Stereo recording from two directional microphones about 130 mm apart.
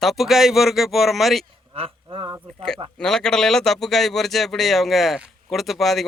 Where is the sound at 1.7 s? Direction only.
50° right (ahead or behind).